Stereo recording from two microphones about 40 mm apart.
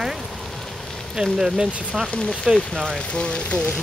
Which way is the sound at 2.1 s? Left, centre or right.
Left.